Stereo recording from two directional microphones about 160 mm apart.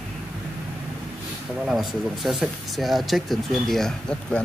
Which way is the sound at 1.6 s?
Centre (ahead or behind).